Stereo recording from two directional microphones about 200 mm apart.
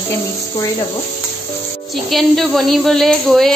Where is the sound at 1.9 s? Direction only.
Centre (ahead or behind).